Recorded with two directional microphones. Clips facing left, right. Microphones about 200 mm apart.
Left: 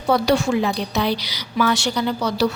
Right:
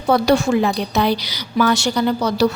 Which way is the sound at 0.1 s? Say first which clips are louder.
Right 3 dB; 45° right (ahead or behind).